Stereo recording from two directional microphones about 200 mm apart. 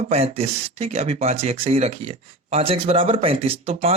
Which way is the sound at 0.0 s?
30° right (ahead or behind).